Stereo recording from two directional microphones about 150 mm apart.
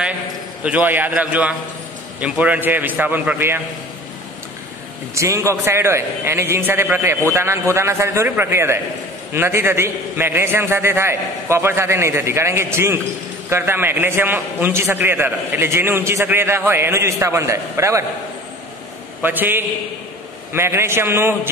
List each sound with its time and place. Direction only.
0.7 s a man's voice: 10° right (ahead or behind)
5.1 s a man's voice: 20° right (ahead or behind)
19.2 s a man's voice: 15° right (ahead or behind)